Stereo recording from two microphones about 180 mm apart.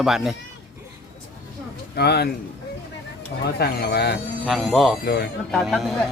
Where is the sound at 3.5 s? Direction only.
60° left (ahead or behind).